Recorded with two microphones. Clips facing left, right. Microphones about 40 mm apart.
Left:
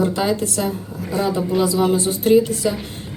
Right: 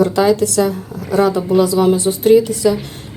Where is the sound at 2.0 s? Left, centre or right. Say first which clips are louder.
Right 6 dB; right.